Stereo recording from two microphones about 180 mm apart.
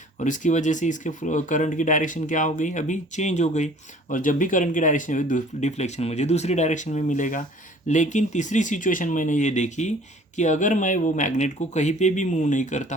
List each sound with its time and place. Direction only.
0.2 s speech: 45° left (ahead or behind)